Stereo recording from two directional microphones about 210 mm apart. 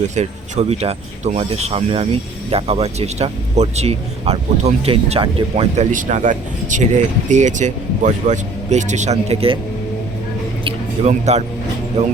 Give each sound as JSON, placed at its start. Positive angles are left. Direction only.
{"t": 0.2, "sound": "speech", "side_deg": -30}
{"t": 10.6, "sound": "a sound", "side_deg": -30}
{"t": 12.0, "sound": "speech", "side_deg": -30}